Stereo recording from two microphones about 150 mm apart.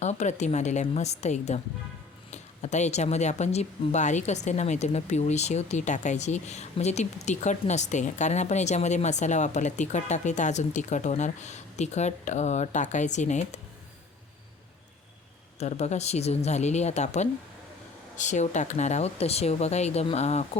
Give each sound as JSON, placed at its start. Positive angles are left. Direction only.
{"t": 0.0, "sound": "speech", "side_deg": 50}
{"t": 15.5, "sound": "speech", "side_deg": 45}